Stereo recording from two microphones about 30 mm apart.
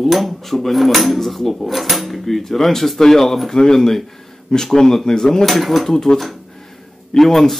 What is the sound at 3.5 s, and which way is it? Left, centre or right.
Speech, centre.